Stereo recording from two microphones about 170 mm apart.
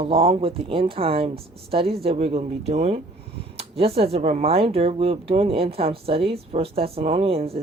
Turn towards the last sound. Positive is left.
turn(degrees=-35)  # may be behind; listen again after turning